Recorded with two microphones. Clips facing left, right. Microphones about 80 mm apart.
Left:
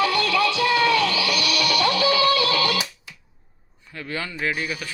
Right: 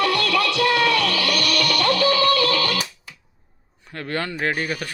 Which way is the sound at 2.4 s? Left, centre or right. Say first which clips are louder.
Right 1 dB; right.